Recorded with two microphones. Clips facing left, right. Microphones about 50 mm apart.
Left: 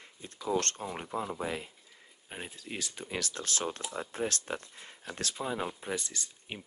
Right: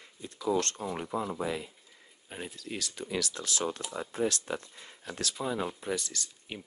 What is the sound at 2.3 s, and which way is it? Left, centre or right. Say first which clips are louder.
Speech: right 2 dB; left.